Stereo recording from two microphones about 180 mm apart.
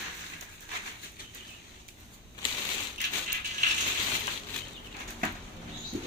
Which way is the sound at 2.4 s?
25° left (ahead or behind).